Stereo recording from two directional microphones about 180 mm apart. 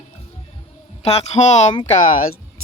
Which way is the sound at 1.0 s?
35° left (ahead or behind).